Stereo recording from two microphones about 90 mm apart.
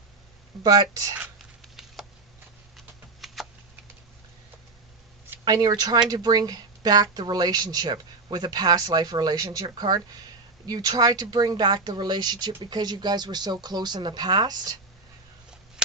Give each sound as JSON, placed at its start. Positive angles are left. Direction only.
{"t": 0.6, "sound": "speech", "side_deg": -45}
{"t": 1.6, "sound": "a sound", "side_deg": 0}
{"t": 5.5, "sound": "speech", "side_deg": -45}